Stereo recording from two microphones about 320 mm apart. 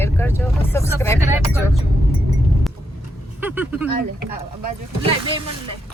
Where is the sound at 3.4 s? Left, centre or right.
Centre.